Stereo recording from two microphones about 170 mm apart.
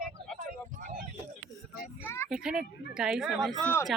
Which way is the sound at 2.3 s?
5° right (ahead or behind).